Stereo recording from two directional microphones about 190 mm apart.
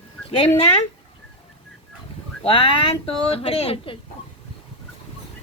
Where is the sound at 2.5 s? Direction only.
25° left (ahead or behind).